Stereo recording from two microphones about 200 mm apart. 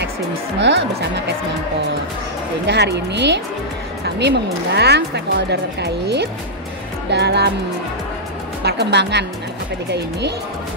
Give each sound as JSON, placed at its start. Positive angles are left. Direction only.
{"t": 0.6, "sound": "speech", "side_deg": -60}
{"t": 2.6, "sound": "speech", "side_deg": -60}
{"t": 8.6, "sound": "speech", "side_deg": -55}